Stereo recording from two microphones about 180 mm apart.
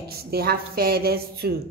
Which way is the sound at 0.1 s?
60° right (ahead or behind).